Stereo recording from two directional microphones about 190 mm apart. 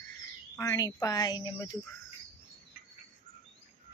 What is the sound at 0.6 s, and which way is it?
A woman's voice, 15° left (ahead or behind).